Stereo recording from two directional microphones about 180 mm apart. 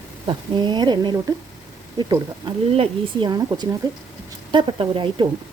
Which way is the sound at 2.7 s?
30° right (ahead or behind).